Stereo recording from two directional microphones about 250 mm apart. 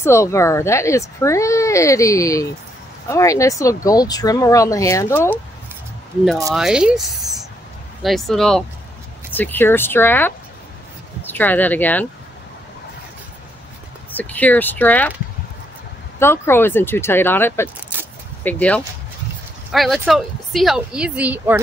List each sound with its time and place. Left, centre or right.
0.0 s speech: centre
6.5 s a woman's voice: centre
14.1 s speech: centre
16.2 s a woman's voice: centre